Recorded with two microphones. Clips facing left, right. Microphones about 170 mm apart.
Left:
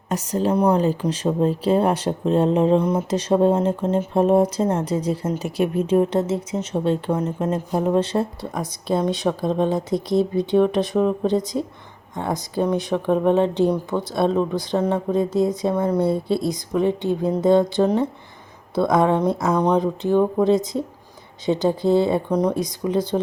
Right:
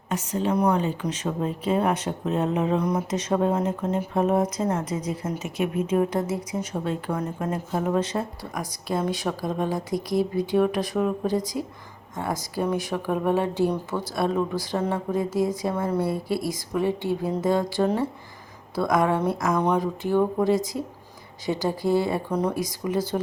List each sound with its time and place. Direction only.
0.1 s a woman's voice: 40° left (ahead or behind); by 23.0 s 20° left (ahead or behind)